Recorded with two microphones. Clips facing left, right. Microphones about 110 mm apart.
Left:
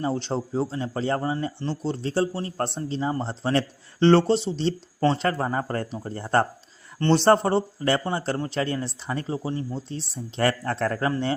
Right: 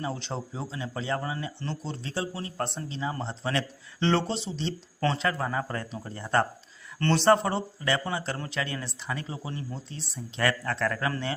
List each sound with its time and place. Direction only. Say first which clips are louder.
0.0 s speech: left 7 dB; 35° left (ahead or behind)